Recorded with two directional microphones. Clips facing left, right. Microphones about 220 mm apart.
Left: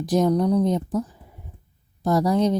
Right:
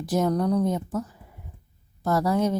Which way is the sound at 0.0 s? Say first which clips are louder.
Left 4 dB; 15° left (ahead or behind).